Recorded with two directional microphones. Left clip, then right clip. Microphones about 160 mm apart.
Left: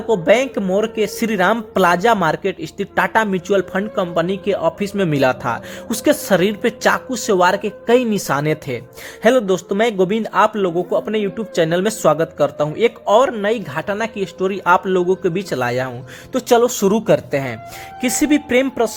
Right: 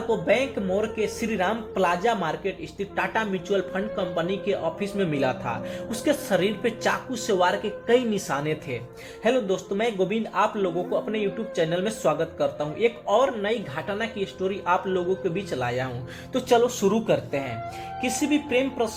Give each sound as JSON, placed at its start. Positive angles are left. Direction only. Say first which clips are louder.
{"t": 0.1, "sound": "speech", "louder": "left 9 dB", "side_deg": 55}
{"t": 18.2, "sound": "speech", "louder": "left 9 dB", "side_deg": 60}